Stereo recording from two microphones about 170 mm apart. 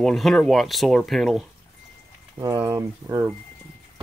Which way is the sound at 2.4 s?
25° right (ahead or behind).